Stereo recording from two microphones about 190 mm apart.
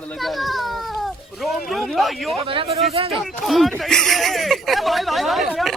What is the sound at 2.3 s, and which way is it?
Speech, 30° right (ahead or behind).